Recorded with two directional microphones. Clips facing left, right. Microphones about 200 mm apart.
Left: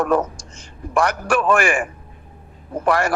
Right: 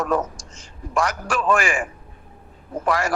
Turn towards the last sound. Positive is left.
turn(degrees=60)  # may be behind; listen again after turning